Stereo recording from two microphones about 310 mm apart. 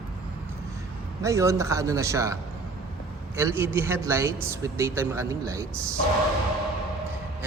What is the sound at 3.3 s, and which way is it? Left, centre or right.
A man's voice, centre.